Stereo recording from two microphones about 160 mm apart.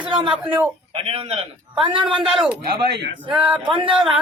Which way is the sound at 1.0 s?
40° right (ahead or behind).